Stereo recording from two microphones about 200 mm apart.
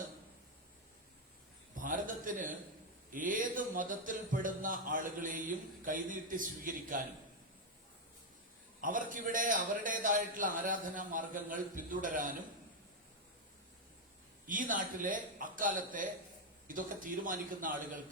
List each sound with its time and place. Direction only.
1.7 s a sound: 40° right (ahead or behind)
3.1 s speech: 40° right (ahead or behind)
8.8 s a man's voice: 45° right (ahead or behind)
14.4 s a man's voice: 40° right (ahead or behind)